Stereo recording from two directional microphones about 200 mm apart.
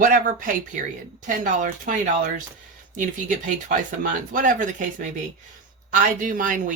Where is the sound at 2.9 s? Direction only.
40° right (ahead or behind).